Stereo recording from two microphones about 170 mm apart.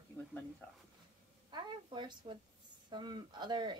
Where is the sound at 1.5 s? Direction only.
25° right (ahead or behind).